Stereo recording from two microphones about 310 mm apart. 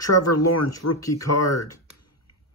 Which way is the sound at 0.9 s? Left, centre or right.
Centre.